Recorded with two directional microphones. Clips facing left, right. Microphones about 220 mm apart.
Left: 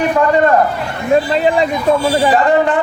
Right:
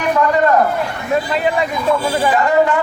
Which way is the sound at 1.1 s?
30° left (ahead or behind).